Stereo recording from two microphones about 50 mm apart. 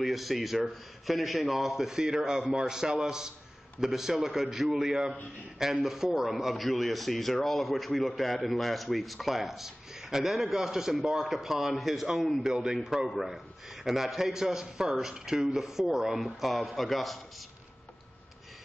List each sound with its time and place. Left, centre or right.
0.0 s a man's voice: centre
12.4 s a man's voice: centre